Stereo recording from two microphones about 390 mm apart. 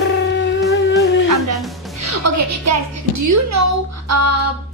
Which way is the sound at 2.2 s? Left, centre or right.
Right.